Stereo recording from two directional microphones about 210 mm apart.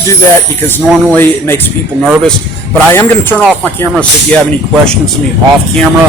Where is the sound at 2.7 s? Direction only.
10° left (ahead or behind).